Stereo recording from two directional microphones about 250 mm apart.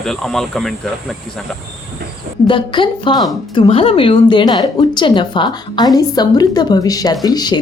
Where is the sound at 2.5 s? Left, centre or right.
Centre.